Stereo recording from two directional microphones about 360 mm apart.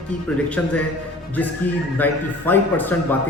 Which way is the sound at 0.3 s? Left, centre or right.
Centre.